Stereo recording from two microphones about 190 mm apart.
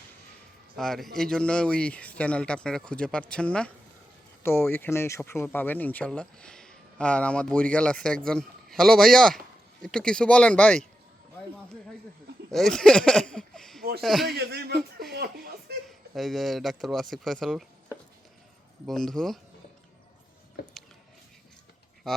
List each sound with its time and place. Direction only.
0.8 s speech: centre (ahead or behind)
12.5 s speech: centre (ahead or behind)
14.3 s music: 60° right (ahead or behind)
15.9 s speech: centre (ahead or behind)
20.6 s a sound: 55° left (ahead or behind)
22.0 s speech: 5° left (ahead or behind)